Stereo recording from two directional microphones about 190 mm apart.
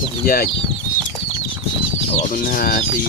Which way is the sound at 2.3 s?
50° left (ahead or behind).